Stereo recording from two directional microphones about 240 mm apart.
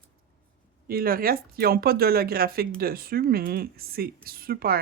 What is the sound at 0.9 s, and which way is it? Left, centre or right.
Speech, right.